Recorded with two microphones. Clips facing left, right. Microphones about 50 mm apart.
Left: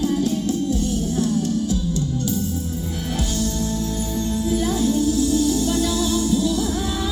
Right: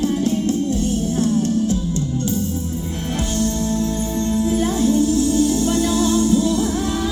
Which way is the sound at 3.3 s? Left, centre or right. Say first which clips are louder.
Right 6 dB; right.